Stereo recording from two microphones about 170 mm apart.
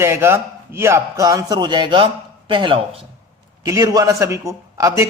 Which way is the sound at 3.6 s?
20° right (ahead or behind).